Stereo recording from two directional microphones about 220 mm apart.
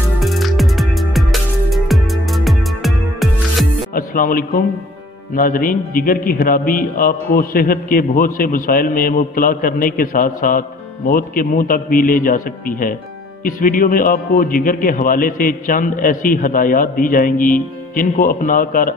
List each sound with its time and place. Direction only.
0.2 s music: centre (ahead or behind)
3.9 s a man's voice: 40° left (ahead or behind)